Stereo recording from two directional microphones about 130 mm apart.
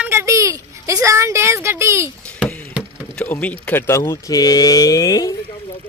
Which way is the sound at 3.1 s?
10° left (ahead or behind).